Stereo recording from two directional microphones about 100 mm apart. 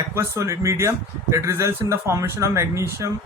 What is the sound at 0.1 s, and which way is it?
Speech, 30° right (ahead or behind).